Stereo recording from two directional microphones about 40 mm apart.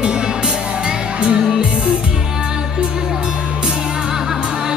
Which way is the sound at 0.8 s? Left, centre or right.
Right.